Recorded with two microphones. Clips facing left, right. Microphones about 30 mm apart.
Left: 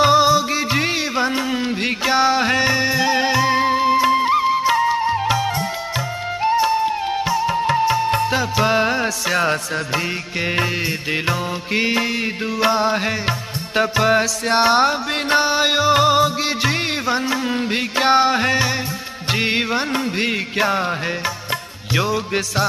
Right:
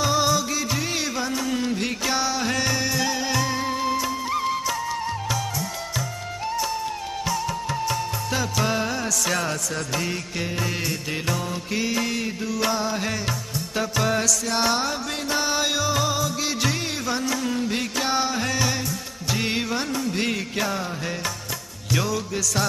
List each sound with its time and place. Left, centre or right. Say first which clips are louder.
0.0 s music: left 8 dB; left
4.4 s music: left 9 dB; left
11.2 s music: left 5 dB; left
21.9 s music: left 5 dB; left